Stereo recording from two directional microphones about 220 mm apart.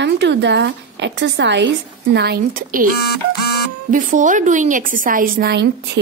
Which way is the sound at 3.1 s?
45° left (ahead or behind).